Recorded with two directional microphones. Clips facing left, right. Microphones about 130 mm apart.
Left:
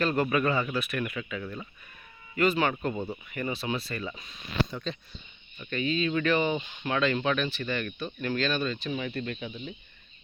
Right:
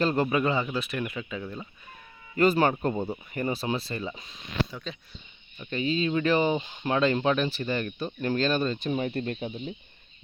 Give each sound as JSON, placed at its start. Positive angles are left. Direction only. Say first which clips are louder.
{"t": 0.0, "sound": "speech", "louder": "right 1 dB", "side_deg": -25}
{"t": 2.3, "sound": "speech", "louder": "right 3 dB", "side_deg": -35}
{"t": 4.7, "sound": "speech", "louder": "left 3 dB", "side_deg": -5}
{"t": 5.7, "sound": "speech", "louder": "right 1 dB", "side_deg": -30}